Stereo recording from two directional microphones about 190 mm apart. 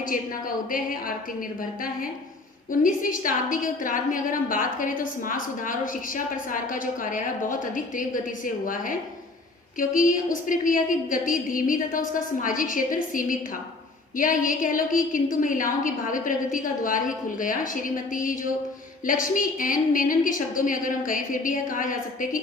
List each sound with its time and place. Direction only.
0.0 s a woman's voice: 45° left (ahead or behind)